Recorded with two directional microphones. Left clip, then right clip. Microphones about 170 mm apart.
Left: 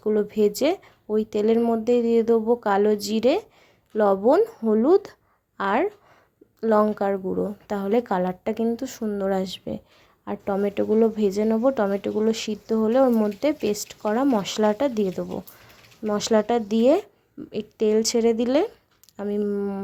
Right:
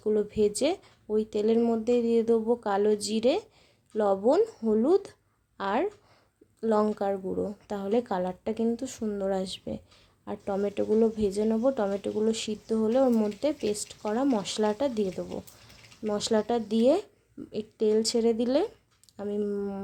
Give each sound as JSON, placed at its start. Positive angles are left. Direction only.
{"t": 0.0, "sound": "a woman's voice", "side_deg": 15}